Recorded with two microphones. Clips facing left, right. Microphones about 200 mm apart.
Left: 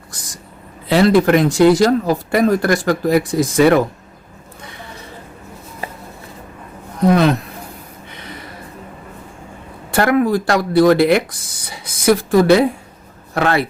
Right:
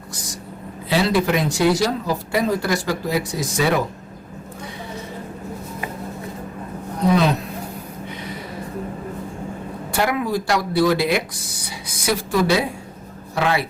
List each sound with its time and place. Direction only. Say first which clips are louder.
0.9 s speech: left 7 dB; 60° left (ahead or behind)
7.1 s speech: left 4 dB; 55° left (ahead or behind)
9.9 s speech: left 7 dB; 55° left (ahead or behind)